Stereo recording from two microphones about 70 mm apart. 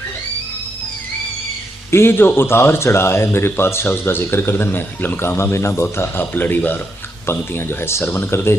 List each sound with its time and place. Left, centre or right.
1.9 s speech: left